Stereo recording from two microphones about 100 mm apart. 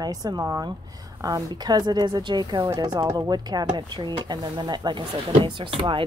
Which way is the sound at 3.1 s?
40° right (ahead or behind).